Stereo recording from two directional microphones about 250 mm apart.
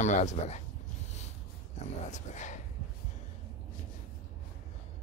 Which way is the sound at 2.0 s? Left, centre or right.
Left.